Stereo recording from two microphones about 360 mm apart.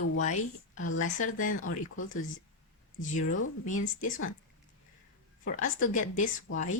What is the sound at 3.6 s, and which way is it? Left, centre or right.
Speech, left.